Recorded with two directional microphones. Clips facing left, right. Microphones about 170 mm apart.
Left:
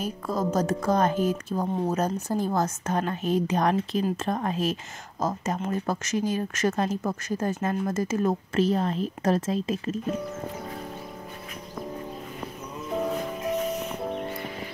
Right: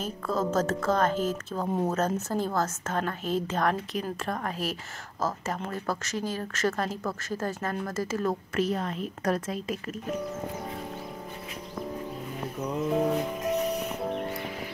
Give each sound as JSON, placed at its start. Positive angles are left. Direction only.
{"t": 0.0, "sound": "a woman's voice", "side_deg": 15}
{"t": 14.0, "sound": "music", "side_deg": 0}